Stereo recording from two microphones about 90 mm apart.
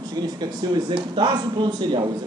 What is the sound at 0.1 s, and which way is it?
Speech, 50° right (ahead or behind).